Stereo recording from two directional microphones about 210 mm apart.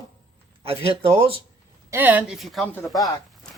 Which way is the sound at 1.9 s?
10° right (ahead or behind).